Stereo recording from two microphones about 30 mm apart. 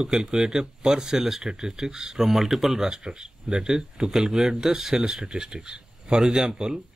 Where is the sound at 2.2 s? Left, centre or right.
Centre.